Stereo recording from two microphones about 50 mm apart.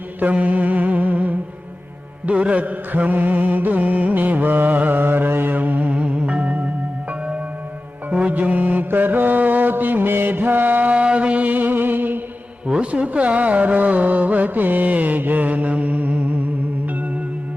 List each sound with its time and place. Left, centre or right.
0.2 s music: right
2.2 s mantra: right
5.9 s music: right
8.3 s mantra: right
12.6 s a sound: right